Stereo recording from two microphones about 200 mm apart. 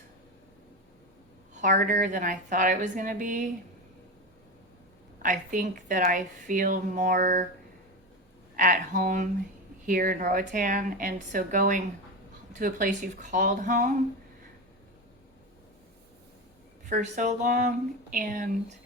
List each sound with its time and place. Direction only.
1.6 s speech: 40° right (ahead or behind)
5.2 s speech: 40° right (ahead or behind)
8.5 s a woman's voice: 40° right (ahead or behind)
16.9 s a woman's voice: 40° right (ahead or behind)